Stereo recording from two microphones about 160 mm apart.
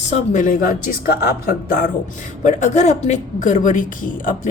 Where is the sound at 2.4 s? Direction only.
50° left (ahead or behind).